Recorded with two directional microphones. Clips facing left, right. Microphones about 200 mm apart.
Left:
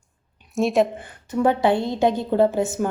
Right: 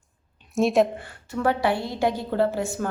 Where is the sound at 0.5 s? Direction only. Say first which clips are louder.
Even; centre (ahead or behind).